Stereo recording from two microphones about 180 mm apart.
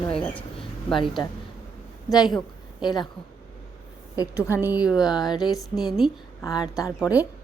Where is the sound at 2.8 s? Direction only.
25° left (ahead or behind).